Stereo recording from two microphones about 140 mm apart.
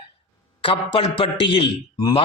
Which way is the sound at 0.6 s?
40° left (ahead or behind).